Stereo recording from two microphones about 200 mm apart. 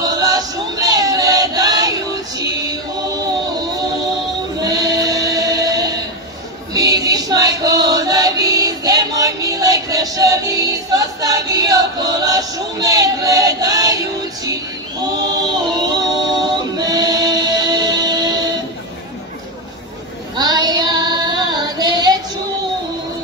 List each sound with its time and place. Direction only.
0.0 s music: 20° right (ahead or behind)
4.6 s singing: 20° right (ahead or behind)
6.7 s music: 20° right (ahead or behind)
15.3 s a capella: 20° right (ahead or behind)
20.3 s child singing: 20° right (ahead or behind)